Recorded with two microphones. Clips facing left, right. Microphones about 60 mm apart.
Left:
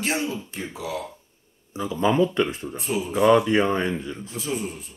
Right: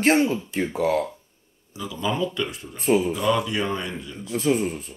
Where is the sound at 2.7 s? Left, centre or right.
Right.